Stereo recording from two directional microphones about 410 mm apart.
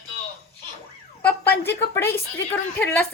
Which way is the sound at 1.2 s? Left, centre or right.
Centre.